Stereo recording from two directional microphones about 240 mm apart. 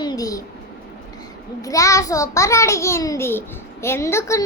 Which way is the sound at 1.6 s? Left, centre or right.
Centre.